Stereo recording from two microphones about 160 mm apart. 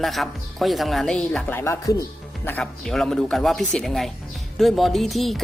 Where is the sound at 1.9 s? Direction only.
20° left (ahead or behind).